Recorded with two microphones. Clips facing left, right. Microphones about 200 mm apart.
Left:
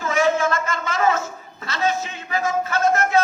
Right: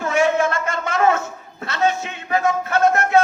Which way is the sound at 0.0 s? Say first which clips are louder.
Right 2 dB; 60° right (ahead or behind).